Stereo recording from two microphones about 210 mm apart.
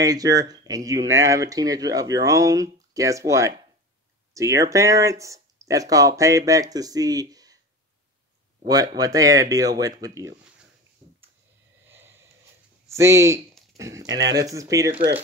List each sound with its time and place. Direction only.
0.0 s speech: 15° right (ahead or behind)
8.6 s speech: 15° right (ahead or behind)
11.0 s a sound: 35° right (ahead or behind)
11.9 s a sound: 10° right (ahead or behind)
12.8 s speech: 15° right (ahead or behind)
14.0 s speech: 55° right (ahead or behind)
14.3 s speech: 15° right (ahead or behind)